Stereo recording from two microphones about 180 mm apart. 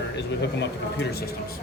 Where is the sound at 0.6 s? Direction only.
70° left (ahead or behind).